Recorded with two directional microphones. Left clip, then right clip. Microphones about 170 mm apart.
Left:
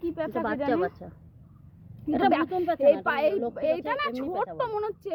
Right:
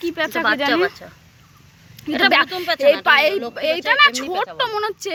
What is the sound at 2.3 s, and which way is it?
Speech, centre (ahead or behind).